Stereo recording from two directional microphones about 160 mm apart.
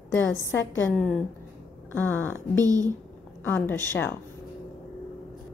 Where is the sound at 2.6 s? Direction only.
20° right (ahead or behind).